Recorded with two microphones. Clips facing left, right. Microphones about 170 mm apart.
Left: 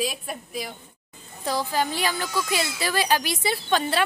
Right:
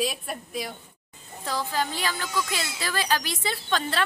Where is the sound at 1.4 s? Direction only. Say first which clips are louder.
Left 3 dB; 15° left (ahead or behind).